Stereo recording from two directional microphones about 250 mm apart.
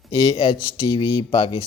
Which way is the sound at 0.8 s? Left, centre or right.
Centre.